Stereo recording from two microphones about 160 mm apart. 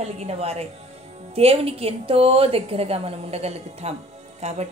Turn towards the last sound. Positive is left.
turn(degrees=-45)  # may be behind; listen again after turning